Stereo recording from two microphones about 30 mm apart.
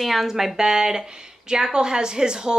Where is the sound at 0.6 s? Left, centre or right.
Centre.